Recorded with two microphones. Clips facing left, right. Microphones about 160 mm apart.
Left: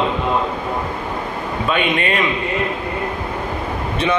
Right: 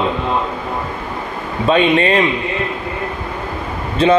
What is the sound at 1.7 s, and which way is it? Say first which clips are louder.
Speech: right 7 dB; 30° right (ahead or behind).